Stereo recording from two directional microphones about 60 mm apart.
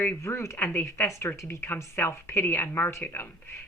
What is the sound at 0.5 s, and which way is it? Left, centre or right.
A woman's voice, left.